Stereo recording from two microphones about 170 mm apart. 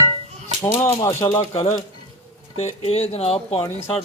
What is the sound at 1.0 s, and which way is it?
Speech, 15° left (ahead or behind).